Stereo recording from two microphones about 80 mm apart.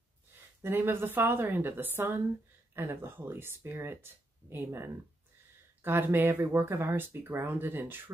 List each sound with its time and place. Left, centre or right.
0.6 s speech: right